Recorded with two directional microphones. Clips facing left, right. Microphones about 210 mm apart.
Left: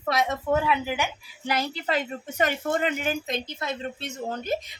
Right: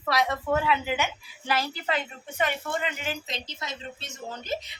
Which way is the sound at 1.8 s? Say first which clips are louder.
Left 3 dB; 40° left (ahead or behind).